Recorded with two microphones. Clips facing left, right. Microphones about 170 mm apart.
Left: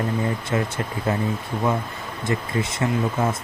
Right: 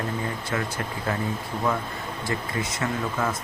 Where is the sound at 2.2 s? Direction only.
25° left (ahead or behind).